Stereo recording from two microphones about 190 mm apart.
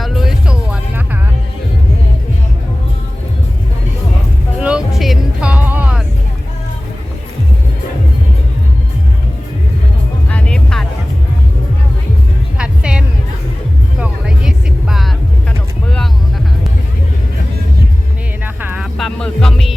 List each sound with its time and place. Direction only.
0.0 s music: centre (ahead or behind)
4.6 s music: 5° right (ahead or behind)
10.2 s music: 5° left (ahead or behind)
12.5 s music: 5° right (ahead or behind)
14.0 s vehicle: 5° right (ahead or behind)
18.4 s music: 10° right (ahead or behind)
18.9 s music: 5° left (ahead or behind)